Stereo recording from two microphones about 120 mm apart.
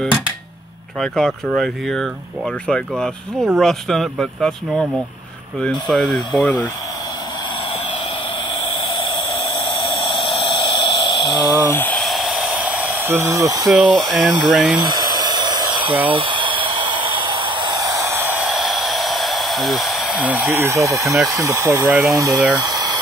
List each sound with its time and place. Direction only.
1.0 s speech: 5° left (ahead or behind)
8.9 s a sound: 45° left (ahead or behind)
11.6 s speech: 15° left (ahead or behind)
12.0 s hair dryer: centre (ahead or behind); by 13.7 s 25° right (ahead or behind)
13.7 s speech: 10° right (ahead or behind)
14.8 s dental drill: 35° right (ahead or behind)
17.7 s a sound: 25° right (ahead or behind)
18.5 s a sound: centre (ahead or behind)
20.5 s speech: 25° right (ahead or behind)
21.0 s speech: centre (ahead or behind)
21.3 s speech: 25° right (ahead or behind)